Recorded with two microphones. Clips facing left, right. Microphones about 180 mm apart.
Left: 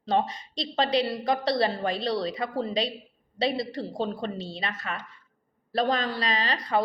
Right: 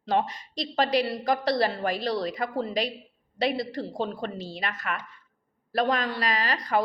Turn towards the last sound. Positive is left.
turn(degrees=25)  # may be behind; listen again after turning